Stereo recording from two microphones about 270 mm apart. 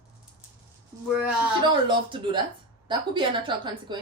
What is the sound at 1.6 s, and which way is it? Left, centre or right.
A woman's voice, centre.